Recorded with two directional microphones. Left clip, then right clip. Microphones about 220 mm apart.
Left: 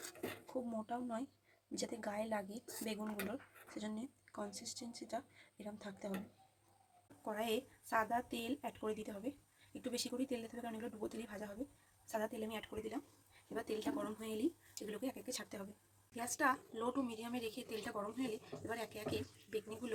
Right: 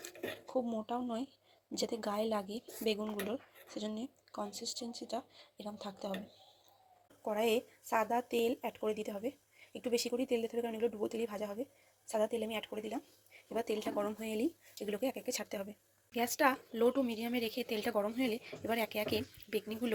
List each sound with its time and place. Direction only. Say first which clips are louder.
0.9 s speech: right 5 dB; 10° right (ahead or behind)
7.3 s speech: right 7 dB; 15° right (ahead or behind)